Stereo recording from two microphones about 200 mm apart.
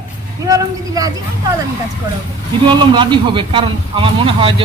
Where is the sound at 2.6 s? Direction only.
20° right (ahead or behind).